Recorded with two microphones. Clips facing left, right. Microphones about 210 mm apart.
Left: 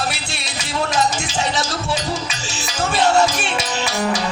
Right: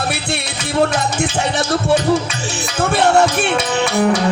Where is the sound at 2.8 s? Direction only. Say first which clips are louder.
Right 3 dB; 55° right (ahead or behind).